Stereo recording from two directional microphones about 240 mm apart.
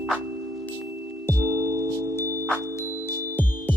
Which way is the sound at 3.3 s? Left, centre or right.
Centre.